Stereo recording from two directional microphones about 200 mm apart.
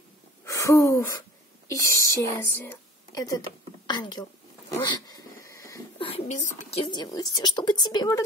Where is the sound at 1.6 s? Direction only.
15° left (ahead or behind).